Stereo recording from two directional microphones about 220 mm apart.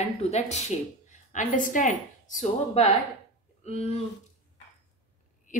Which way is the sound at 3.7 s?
30° left (ahead or behind).